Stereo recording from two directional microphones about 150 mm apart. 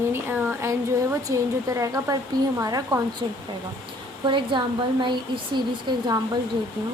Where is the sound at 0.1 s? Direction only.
15° right (ahead or behind).